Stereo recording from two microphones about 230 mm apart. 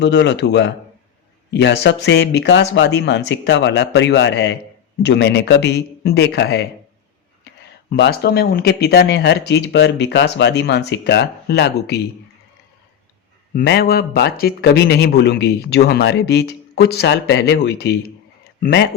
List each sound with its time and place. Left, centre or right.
0.0 s speech: left
7.9 s speech: left
13.5 s speech: left